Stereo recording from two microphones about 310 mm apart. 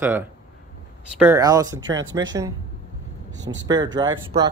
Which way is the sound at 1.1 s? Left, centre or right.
Centre.